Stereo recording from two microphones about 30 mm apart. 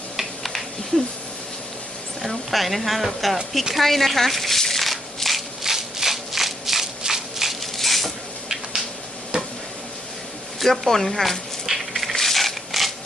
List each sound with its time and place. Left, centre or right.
0.9 s speech: left
2.2 s speech: centre
4.7 s a sound: centre
5.6 s rattle: centre
7.0 s a sound: centre
7.6 s a sound: centre
9.3 s stir: right
10.7 s speech: centre
11.6 s rub: centre
12.1 s rub: centre